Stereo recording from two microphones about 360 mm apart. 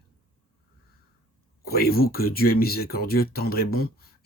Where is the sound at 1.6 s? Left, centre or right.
Left.